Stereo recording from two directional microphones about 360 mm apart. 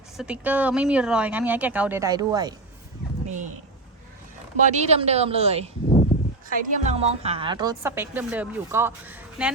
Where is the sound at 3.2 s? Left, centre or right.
Centre.